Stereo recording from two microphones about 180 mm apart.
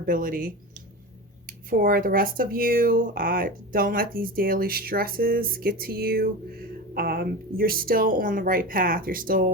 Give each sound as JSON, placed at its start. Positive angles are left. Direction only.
{"t": 0.0, "sound": "speech", "side_deg": -50}